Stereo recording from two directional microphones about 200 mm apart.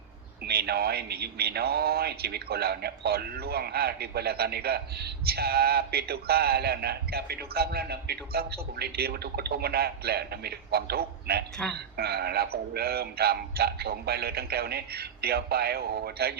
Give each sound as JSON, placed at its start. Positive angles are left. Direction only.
{"t": 0.4, "sound": "speech", "side_deg": -55}